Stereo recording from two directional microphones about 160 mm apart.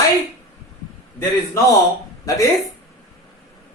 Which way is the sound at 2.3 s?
20° left (ahead or behind).